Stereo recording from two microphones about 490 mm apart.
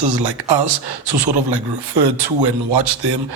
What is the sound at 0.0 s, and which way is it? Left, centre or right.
Speech, right.